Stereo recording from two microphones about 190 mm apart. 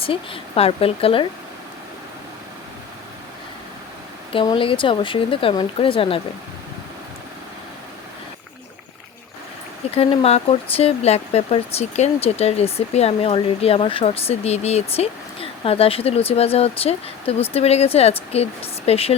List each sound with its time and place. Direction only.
0.0 s speech: 30° left (ahead or behind)
4.3 s speech: 25° left (ahead or behind)
9.9 s speech: 30° left (ahead or behind)